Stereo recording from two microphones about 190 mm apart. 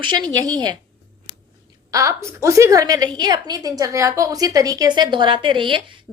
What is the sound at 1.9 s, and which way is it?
A woman's voice, 15° right (ahead or behind).